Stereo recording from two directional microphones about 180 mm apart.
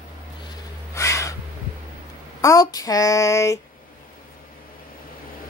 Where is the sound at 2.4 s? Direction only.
20° left (ahead or behind).